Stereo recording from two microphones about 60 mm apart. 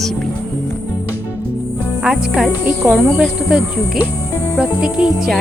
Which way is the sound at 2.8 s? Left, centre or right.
Right.